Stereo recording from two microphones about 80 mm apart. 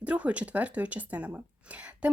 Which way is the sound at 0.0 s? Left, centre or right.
Centre.